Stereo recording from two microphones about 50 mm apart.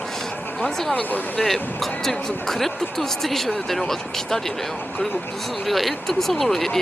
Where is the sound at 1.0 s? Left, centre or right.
Left.